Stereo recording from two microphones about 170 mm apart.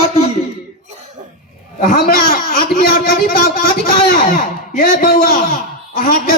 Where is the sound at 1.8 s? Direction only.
55° left (ahead or behind).